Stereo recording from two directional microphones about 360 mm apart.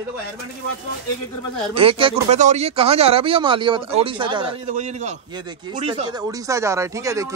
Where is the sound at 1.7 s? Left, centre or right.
Centre.